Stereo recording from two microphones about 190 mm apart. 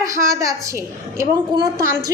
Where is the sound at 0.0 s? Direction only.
15° right (ahead or behind).